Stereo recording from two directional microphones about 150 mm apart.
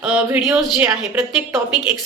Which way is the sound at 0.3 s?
5° right (ahead or behind).